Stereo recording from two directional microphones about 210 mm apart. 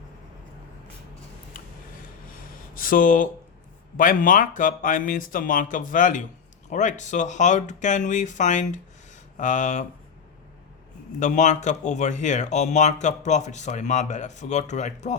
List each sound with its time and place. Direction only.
2.7 s speech: 40° left (ahead or behind)
11.2 s speech: 35° left (ahead or behind)